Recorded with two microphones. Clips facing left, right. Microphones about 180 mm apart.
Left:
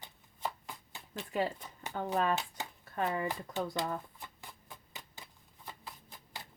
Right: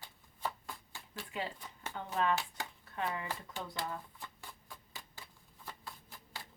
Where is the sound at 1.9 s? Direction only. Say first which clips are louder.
Left 2 dB; 45° left (ahead or behind).